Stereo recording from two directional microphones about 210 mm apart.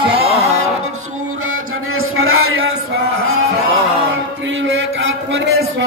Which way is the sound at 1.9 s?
80° right.